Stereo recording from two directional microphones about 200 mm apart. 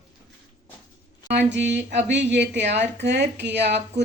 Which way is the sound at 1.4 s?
60° right (ahead or behind).